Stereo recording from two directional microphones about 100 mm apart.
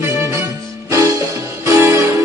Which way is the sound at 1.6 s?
25° right (ahead or behind).